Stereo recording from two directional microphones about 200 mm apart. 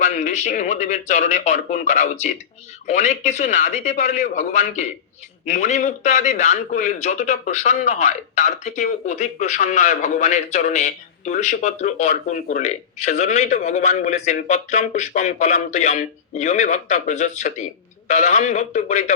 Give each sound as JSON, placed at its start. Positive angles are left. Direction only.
{"t": 0.0, "sound": "a man's voice", "side_deg": 35}